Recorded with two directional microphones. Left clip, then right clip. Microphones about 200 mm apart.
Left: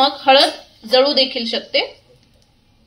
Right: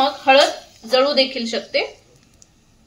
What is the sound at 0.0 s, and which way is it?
Speech, 15° left (ahead or behind).